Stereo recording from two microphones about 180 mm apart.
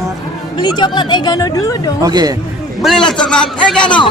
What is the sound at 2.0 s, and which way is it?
Speech, 20° right (ahead or behind).